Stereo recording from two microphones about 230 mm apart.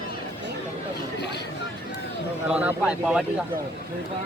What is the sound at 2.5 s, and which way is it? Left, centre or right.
Speech, centre.